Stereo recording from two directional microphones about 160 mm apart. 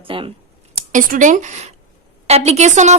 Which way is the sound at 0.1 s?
35° right (ahead or behind).